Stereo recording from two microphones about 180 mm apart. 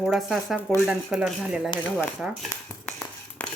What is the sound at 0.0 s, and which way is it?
Speech, centre (ahead or behind).